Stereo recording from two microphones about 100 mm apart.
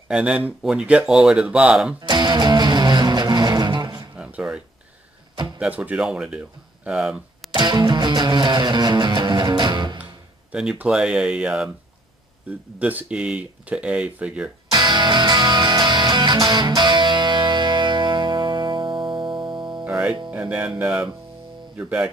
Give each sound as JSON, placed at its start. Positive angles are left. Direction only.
{"t": 0.1, "sound": "speech", "side_deg": -10}
{"t": 2.0, "sound": "music", "side_deg": -50}
{"t": 4.2, "sound": "a sound", "side_deg": -10}
{"t": 5.6, "sound": "speech", "side_deg": -15}
{"t": 7.5, "sound": "music", "side_deg": -50}
{"t": 10.5, "sound": "speech", "side_deg": -10}
{"t": 14.7, "sound": "music", "side_deg": -50}
{"t": 19.8, "sound": "music", "side_deg": -10}
{"t": 21.7, "sound": "speech", "side_deg": -15}